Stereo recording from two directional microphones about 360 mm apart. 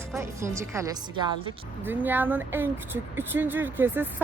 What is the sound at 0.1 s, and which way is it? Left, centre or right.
Speech, centre.